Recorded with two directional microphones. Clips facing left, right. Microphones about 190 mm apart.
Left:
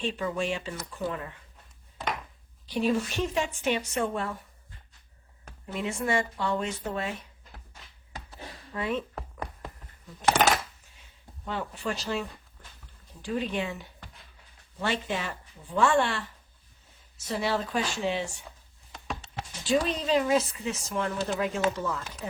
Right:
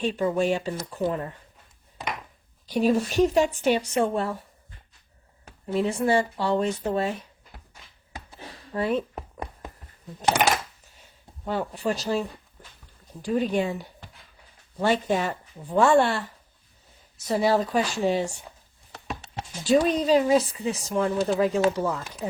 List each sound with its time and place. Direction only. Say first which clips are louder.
0.0 s speech: right 6 dB; 40° right (ahead or behind)
2.6 s speech: right 4 dB; 40° right (ahead or behind)
5.7 s speech: right 6 dB; 30° right (ahead or behind)
8.7 s speech: right 5 dB; 35° right (ahead or behind)
9.1 s a sound: right 2 dB; 15° right (ahead or behind)
11.4 s speech: right 6 dB; 40° right (ahead or behind)
13.2 s speech: right 6 dB; 40° right (ahead or behind)
17.2 s speech: right 7 dB; 40° right (ahead or behind)
19.6 s speech: right 6 dB; 40° right (ahead or behind)